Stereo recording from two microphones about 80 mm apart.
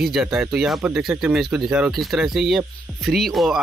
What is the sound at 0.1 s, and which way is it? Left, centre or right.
Speech, centre.